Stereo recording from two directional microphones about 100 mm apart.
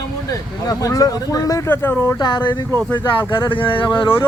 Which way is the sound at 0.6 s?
35° left (ahead or behind).